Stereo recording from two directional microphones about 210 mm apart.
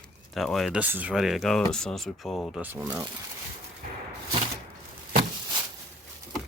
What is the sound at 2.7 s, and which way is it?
Speech, 10° right (ahead or behind).